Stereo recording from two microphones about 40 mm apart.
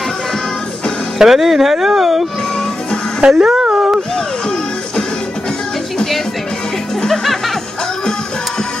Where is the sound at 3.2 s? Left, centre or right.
Right.